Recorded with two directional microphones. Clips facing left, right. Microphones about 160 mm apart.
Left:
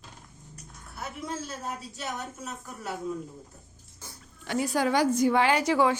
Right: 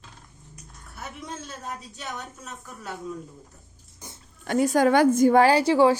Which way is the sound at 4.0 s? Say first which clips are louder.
Right 3 dB; 20° right (ahead or behind).